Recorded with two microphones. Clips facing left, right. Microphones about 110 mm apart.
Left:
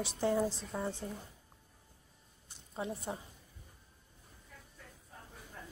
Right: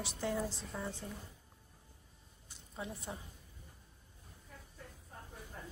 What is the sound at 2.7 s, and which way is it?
Speech, 30° left (ahead or behind).